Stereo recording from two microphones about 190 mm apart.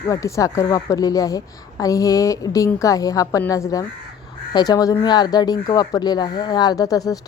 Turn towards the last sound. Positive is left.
turn(degrees=20)  # may be behind; listen again after turning